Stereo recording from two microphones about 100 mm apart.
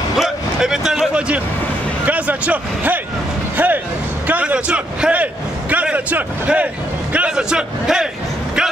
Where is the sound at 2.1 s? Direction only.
15° right (ahead or behind).